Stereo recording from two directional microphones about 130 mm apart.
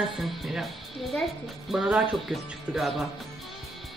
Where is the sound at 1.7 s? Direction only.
5° right (ahead or behind).